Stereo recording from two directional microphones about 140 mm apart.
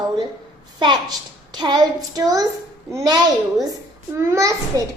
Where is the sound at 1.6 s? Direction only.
30° right (ahead or behind).